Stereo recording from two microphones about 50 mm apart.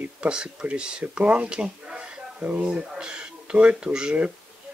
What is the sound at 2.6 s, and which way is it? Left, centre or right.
Speech, centre.